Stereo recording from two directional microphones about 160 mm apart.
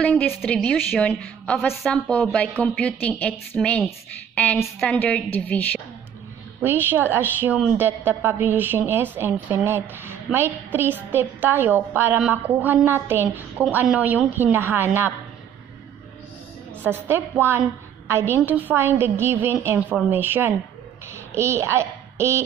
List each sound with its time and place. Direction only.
0.0 s a woman's voice: 10° left (ahead or behind)
6.6 s a woman's voice: 15° right (ahead or behind)
16.8 s a woman's voice: 10° right (ahead or behind)